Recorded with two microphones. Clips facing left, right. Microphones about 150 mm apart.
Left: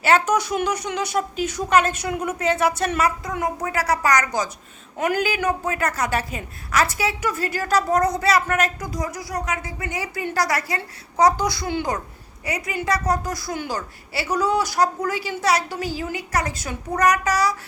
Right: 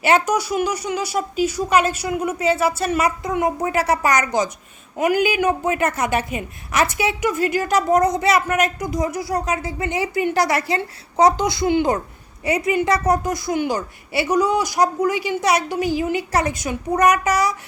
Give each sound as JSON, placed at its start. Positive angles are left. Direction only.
{"t": 0.0, "sound": "speech", "side_deg": -15}
{"t": 3.2, "sound": "a woman's voice", "side_deg": -20}
{"t": 4.9, "sound": "a woman's voice", "side_deg": -10}